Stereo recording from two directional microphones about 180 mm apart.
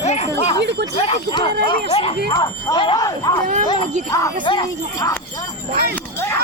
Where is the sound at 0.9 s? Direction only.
30° left (ahead or behind).